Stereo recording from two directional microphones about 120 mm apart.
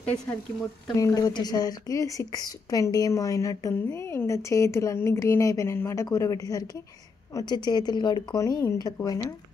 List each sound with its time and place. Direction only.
0.9 s a woman's voice: 30° left (ahead or behind)
8.4 s a woman's voice: 25° left (ahead or behind)